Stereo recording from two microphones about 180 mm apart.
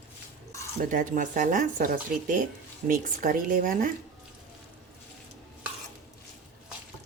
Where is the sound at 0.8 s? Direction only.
45° right (ahead or behind).